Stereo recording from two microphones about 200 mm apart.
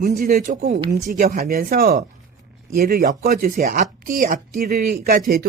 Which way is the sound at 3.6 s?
40° right (ahead or behind).